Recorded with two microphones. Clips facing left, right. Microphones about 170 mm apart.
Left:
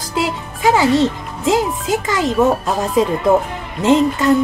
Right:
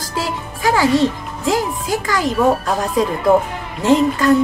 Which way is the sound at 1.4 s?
20° left (ahead or behind).